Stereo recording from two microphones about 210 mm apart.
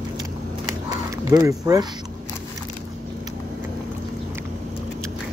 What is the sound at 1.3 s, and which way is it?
Speech, 15° right (ahead or behind).